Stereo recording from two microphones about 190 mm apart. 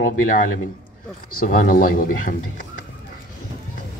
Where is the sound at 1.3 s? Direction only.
45° left (ahead or behind).